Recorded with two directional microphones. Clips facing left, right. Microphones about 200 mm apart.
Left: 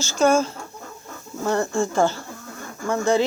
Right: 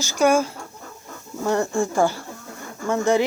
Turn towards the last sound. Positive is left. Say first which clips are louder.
# right 1 dB
turn(degrees=-20)  # may be behind; listen again after turning